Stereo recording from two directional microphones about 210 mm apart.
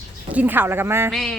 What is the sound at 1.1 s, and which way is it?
Speech, centre (ahead or behind).